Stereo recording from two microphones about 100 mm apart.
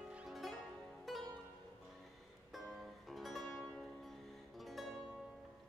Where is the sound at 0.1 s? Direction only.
5° right (ahead or behind).